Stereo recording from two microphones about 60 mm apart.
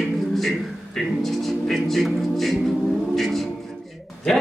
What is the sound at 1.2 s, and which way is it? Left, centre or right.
Speech, centre.